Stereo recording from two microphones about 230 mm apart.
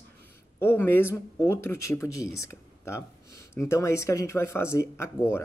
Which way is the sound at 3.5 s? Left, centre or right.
Centre.